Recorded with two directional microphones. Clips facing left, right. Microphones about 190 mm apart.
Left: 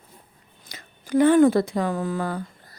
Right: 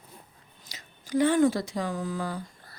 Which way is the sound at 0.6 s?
55° left (ahead or behind).